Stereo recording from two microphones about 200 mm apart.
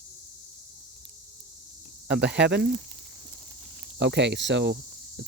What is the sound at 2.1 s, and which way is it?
Speech, 60° right (ahead or behind).